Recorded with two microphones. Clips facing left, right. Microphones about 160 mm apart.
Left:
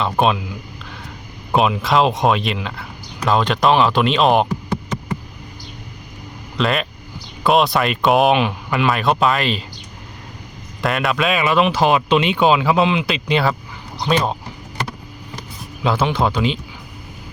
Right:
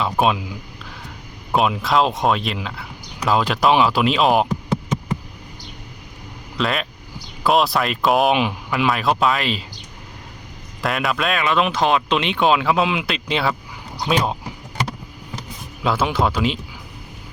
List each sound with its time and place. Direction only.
0.0 s speech: 5° right (ahead or behind)
1.5 s speech: centre (ahead or behind)
4.4 s a sound: 15° right (ahead or behind)
6.6 s speech: centre (ahead or behind)
10.8 s speech: centre (ahead or behind)
15.8 s speech: centre (ahead or behind)